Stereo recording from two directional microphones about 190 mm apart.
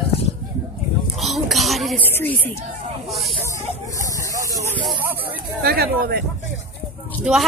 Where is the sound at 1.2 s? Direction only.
Centre (ahead or behind).